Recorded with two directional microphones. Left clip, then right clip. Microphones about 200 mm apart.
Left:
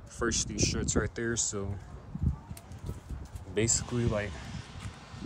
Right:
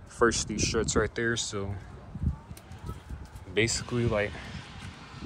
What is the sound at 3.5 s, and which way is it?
Speech, 20° left (ahead or behind).